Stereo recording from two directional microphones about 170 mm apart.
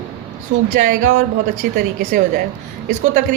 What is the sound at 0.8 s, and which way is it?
A woman's voice, 50° right (ahead or behind).